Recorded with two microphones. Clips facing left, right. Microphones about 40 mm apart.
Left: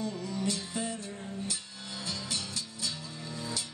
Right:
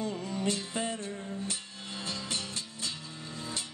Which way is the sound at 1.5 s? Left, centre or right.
Right.